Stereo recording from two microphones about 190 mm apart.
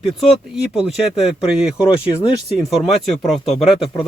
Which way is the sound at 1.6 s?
5° right (ahead or behind).